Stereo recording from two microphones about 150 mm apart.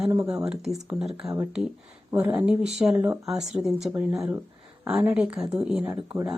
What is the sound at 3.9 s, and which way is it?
Speech, 15° right (ahead or behind).